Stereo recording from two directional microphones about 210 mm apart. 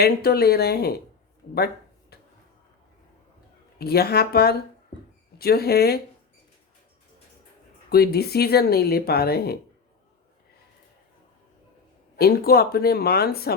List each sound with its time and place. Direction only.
0.0 s speech: 50° left (ahead or behind)
1.5 s a sound: 50° left (ahead or behind)
3.8 s speech: 45° left (ahead or behind)
7.9 s speech: 50° left (ahead or behind)
12.1 s speech: 45° left (ahead or behind)